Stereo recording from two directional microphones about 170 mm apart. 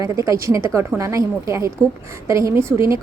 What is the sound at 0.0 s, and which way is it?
A woman's voice, 20° right (ahead or behind).